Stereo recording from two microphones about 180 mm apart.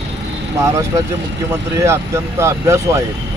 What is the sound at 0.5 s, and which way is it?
Speech, 15° right (ahead or behind).